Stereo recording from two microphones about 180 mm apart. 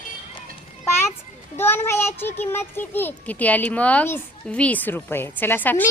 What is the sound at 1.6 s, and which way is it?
A child's voice, 10° left (ahead or behind).